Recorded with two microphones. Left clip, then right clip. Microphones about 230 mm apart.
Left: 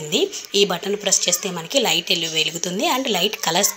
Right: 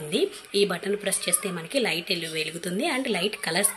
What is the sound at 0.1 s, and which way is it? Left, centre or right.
A woman's voice, centre.